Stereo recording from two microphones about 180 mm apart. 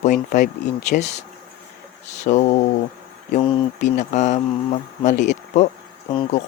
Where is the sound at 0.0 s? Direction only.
45° left (ahead or behind).